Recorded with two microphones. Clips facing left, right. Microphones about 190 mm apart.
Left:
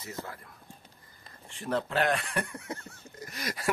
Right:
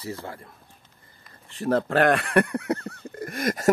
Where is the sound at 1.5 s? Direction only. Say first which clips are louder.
Right 8 dB; 40° right (ahead or behind).